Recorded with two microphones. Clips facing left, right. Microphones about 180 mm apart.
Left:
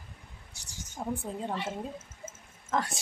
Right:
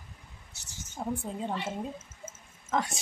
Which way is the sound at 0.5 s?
15° left (ahead or behind).